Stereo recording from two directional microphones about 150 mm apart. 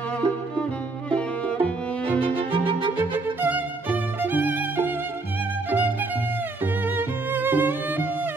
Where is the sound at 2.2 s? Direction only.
35° right (ahead or behind).